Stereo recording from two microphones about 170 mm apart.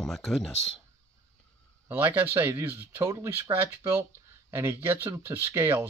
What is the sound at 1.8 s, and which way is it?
Speech, 10° right (ahead or behind).